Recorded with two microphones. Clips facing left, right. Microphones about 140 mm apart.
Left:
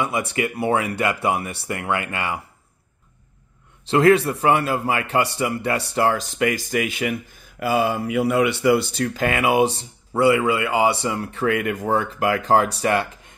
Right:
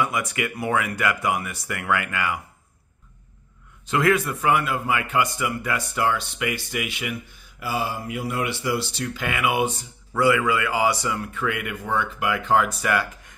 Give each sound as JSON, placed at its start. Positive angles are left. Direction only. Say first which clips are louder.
{"t": 0.0, "sound": "speech", "louder": "left 2 dB", "side_deg": 25}
{"t": 3.9, "sound": "speech", "louder": "left 6 dB", "side_deg": 30}
{"t": 7.6, "sound": "speech", "louder": "left 7 dB", "side_deg": 60}